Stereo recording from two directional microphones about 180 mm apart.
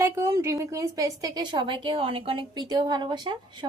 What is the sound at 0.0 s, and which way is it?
A woman's voice, 15° right (ahead or behind).